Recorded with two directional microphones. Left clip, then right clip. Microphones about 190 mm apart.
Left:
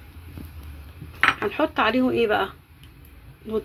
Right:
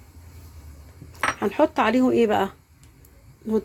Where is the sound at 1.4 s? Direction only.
85° right.